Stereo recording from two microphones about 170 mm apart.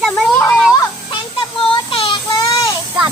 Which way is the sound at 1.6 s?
30° left (ahead or behind).